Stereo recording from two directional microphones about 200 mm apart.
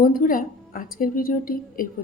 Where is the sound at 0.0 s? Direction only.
45° left (ahead or behind).